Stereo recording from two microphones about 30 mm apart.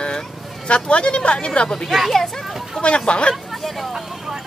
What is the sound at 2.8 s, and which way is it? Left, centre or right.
Speech, left.